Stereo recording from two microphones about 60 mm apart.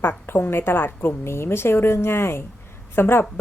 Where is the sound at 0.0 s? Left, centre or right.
Left.